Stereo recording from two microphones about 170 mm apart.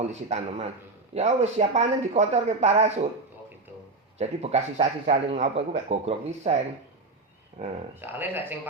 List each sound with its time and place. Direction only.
0.0 s speech: 40° right (ahead or behind)
4.2 s speech: 40° right (ahead or behind)
7.6 s speech: 40° right (ahead or behind)
7.9 s speech: 10° right (ahead or behind)